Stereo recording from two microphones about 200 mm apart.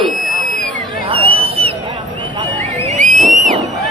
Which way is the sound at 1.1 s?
25° right (ahead or behind).